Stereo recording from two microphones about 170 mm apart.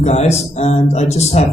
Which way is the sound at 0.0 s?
40° left (ahead or behind).